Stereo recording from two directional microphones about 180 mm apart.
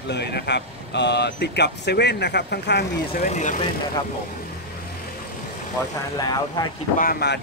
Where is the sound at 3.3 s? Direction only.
45° left (ahead or behind).